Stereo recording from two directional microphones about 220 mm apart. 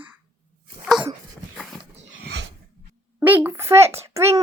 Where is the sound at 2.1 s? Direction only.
50° right (ahead or behind).